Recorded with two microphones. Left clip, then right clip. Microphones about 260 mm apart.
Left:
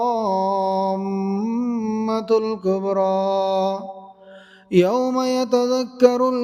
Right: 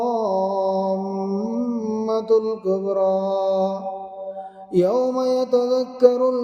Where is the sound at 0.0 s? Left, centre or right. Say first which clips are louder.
Left 1 dB; left.